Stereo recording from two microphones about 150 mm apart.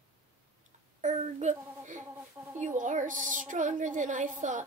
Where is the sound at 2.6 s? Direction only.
55° right (ahead or behind).